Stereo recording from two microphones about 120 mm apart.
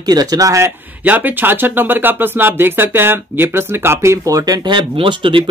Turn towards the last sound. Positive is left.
turn(degrees=-45)  # may be behind; listen again after turning